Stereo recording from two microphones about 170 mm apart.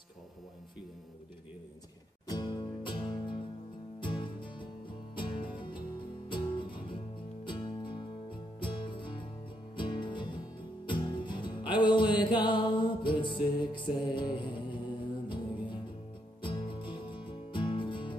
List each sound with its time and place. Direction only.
2.2 s music: 25° left (ahead or behind)